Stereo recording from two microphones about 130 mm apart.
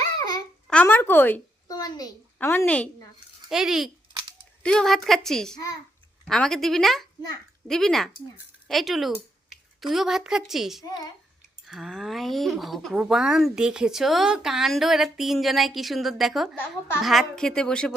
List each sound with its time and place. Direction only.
0.2 s babbling: 30° left (ahead or behind)
0.7 s speech: 10° left (ahead or behind)
1.6 s a child's voice: 30° left (ahead or behind)
2.4 s speech: 15° left (ahead or behind)
3.5 s speech: 5° right (ahead or behind)